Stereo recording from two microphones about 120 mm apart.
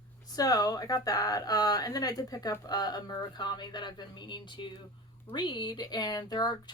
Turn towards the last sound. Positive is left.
turn(degrees=35)  # may be behind; listen again after turning